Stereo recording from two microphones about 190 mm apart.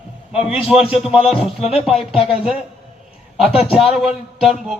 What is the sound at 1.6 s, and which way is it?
Speech, 30° left (ahead or behind).